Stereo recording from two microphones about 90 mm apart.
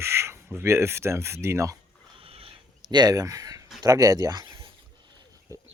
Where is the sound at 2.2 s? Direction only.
90° right.